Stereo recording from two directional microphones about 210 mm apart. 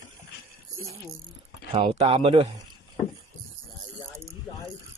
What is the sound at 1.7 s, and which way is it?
Speech, 25° right (ahead or behind).